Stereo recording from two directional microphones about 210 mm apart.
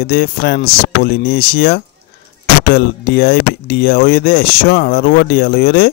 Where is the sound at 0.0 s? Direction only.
50° left (ahead or behind).